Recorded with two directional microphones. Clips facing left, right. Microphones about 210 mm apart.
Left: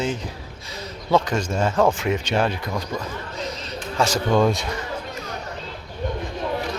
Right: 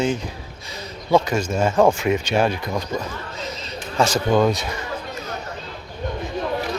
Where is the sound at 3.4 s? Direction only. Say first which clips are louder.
Left 2 dB; 5° right (ahead or behind).